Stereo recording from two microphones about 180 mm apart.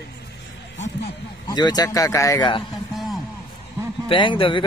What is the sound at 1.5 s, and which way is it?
A man's voice, 20° left (ahead or behind).